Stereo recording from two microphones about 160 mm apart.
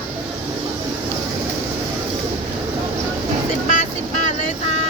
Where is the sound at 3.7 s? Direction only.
50° left (ahead or behind).